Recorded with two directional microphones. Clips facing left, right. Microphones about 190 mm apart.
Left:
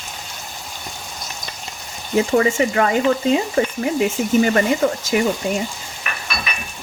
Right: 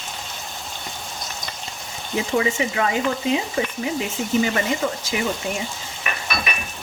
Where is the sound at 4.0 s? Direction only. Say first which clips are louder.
Left 6 dB; 50° left (ahead or behind).